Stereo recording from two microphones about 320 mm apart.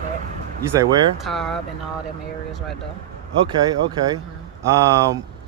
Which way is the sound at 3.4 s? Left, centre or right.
Centre.